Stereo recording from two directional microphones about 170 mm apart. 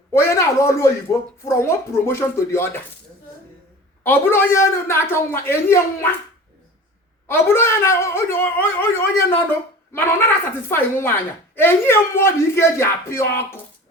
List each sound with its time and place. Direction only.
0.1 s a sound: 15° left (ahead or behind)
1.5 s speech: 15° left (ahead or behind)
4.0 s speech: 15° left (ahead or behind)
7.3 s speech: 15° left (ahead or behind)